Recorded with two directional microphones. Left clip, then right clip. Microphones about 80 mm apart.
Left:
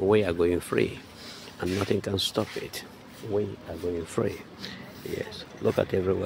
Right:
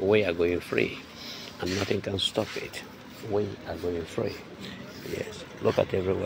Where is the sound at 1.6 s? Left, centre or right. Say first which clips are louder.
Left 1 dB; left.